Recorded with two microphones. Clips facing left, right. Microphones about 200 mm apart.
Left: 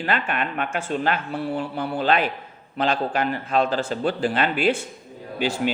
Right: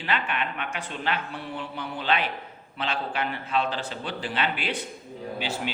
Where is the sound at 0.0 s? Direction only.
45° left (ahead or behind).